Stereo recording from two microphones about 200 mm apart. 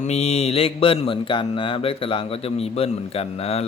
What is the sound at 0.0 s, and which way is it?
Speech, 35° left (ahead or behind).